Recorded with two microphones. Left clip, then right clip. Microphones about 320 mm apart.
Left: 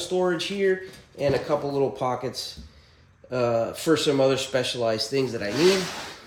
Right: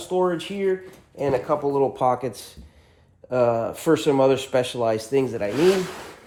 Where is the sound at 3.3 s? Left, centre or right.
Centre.